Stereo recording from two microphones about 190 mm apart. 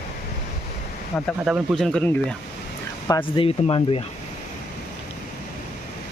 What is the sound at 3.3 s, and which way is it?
Speech, 30° left (ahead or behind).